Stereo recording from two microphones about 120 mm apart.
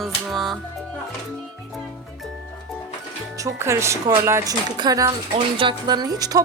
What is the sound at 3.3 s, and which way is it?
Speech, 25° right (ahead or behind).